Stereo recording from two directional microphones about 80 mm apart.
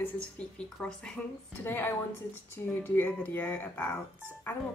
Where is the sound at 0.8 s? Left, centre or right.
Left.